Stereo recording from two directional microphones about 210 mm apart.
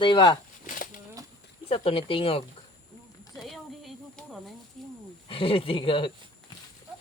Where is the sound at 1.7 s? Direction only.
25° left (ahead or behind).